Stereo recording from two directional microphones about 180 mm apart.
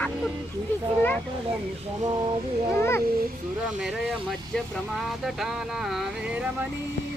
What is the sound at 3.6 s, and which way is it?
Speech, 5° right (ahead or behind).